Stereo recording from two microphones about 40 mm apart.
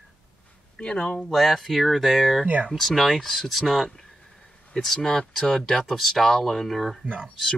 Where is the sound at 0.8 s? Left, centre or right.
Left.